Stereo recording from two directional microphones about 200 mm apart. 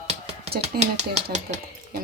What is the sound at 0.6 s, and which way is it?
Speech, 35° right (ahead or behind).